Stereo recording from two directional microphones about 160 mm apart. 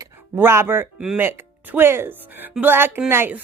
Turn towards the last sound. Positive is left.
turn(degrees=-15)  # may be behind; listen again after turning